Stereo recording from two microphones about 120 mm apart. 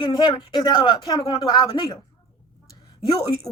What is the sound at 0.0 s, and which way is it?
Speech, 35° left (ahead or behind).